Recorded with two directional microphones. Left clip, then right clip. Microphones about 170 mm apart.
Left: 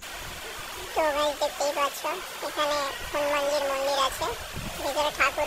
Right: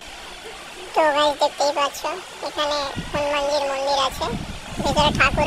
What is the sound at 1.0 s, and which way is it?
Speech, 30° right (ahead or behind).